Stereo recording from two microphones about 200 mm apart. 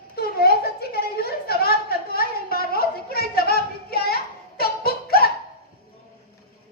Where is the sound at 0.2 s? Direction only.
50° left (ahead or behind).